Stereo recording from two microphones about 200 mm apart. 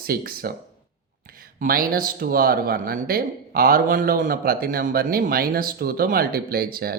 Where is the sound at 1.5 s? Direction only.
45° right (ahead or behind).